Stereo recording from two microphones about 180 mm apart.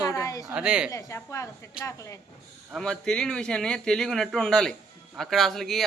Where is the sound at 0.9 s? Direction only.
20° left (ahead or behind).